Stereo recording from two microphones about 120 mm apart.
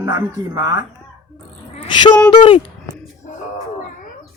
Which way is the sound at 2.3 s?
45° left (ahead or behind).